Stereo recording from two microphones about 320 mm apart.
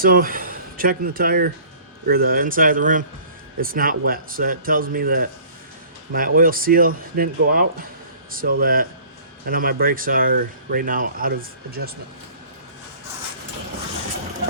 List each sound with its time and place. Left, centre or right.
0.0 s speech: right